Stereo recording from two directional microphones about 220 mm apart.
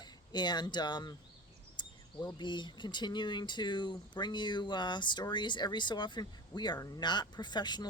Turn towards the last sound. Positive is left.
turn(degrees=20)  # may be behind; listen again after turning